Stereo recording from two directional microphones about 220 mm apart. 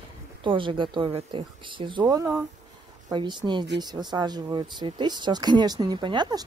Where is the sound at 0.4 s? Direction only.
20° right (ahead or behind).